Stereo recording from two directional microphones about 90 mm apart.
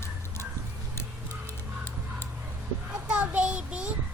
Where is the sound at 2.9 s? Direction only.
10° right (ahead or behind).